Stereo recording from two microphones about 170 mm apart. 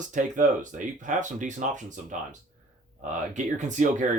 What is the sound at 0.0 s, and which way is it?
Speech, 45° right (ahead or behind).